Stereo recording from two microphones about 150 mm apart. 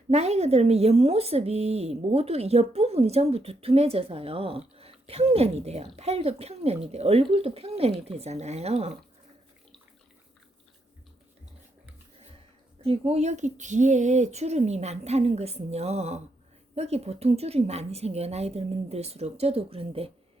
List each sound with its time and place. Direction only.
0.1 s speech: 45° right (ahead or behind)
12.8 s speech: 40° right (ahead or behind)